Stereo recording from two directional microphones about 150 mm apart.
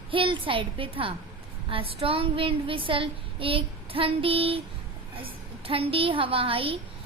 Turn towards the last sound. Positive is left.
turn(degrees=-35)  # may be behind; listen again after turning